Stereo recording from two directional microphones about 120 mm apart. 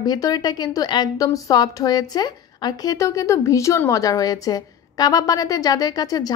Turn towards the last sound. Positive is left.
turn(degrees=30)  # may be behind; listen again after turning